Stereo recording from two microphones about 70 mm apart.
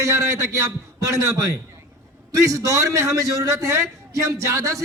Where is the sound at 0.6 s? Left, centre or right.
Right.